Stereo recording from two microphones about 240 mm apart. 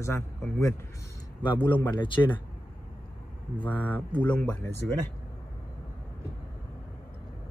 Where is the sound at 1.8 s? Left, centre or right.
Centre.